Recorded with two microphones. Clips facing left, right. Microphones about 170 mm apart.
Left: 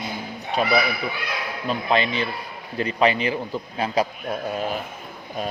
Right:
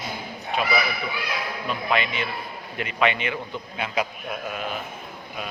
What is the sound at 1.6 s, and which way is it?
Speech, 30° left (ahead or behind).